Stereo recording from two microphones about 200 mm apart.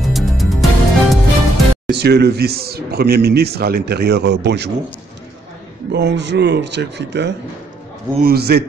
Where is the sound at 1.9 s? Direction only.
55° right (ahead or behind).